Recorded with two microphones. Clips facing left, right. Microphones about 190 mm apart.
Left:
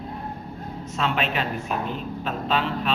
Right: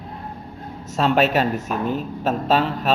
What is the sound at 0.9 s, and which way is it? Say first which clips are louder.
A woman's voice: right 8 dB; 40° right (ahead or behind).